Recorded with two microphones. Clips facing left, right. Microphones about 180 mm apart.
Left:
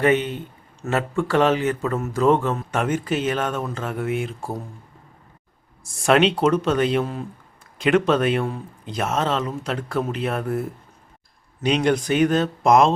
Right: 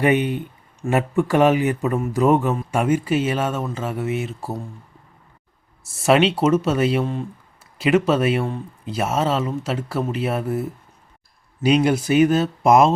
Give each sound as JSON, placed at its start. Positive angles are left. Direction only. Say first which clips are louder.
{"t": 0.0, "sound": "speech", "louder": "right 1 dB", "side_deg": -10}
{"t": 6.0, "sound": "speech", "louder": "right 1 dB", "side_deg": 0}